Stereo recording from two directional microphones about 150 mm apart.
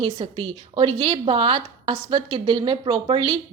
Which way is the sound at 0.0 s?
35° right (ahead or behind).